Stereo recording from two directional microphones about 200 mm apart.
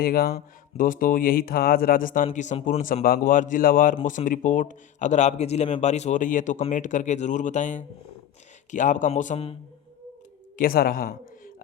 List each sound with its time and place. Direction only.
0.0 s speech: 50° left (ahead or behind); by 9.6 s 30° left (ahead or behind)
10.6 s speech: 50° left (ahead or behind)